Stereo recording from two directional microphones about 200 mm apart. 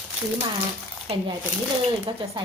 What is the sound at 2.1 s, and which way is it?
Speech, 25° right (ahead or behind).